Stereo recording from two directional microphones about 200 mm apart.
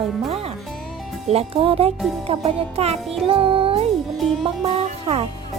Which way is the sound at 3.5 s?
25° right (ahead or behind).